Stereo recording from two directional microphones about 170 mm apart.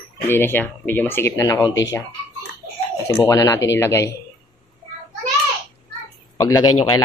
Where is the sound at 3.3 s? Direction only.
20° left (ahead or behind).